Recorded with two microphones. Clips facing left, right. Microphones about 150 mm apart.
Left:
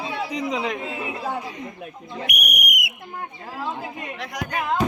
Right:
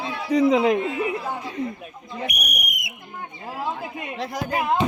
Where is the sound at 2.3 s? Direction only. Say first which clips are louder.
Left 3 dB; 80° left.